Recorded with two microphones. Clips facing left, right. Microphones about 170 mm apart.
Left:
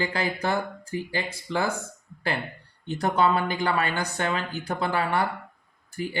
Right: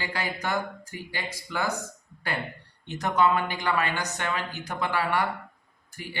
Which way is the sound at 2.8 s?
35° left (ahead or behind).